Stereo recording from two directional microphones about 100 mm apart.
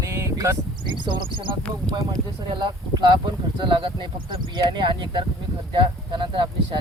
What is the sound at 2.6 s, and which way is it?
Speech, 45° right (ahead or behind).